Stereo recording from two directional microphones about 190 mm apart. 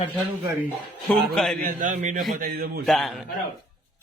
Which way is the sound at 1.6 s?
45° right (ahead or behind).